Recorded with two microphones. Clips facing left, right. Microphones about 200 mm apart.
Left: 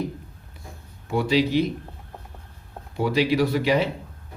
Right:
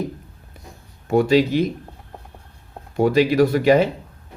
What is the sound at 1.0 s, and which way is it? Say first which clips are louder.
Speech: right 6 dB; 50° right (ahead or behind).